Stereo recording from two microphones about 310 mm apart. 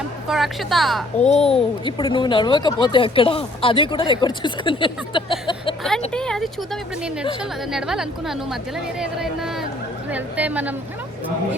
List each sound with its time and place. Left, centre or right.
0.3 s a woman's voice: centre
1.2 s a child's voice: left
6.1 s a woman's voice: centre